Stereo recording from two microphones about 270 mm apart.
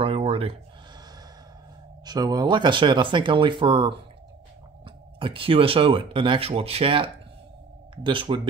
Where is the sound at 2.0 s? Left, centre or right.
Centre.